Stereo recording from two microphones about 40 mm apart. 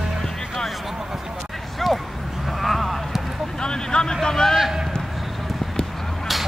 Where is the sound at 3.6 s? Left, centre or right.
Centre.